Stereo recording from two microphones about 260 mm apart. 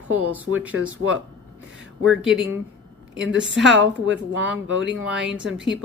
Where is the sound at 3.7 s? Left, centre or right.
Right.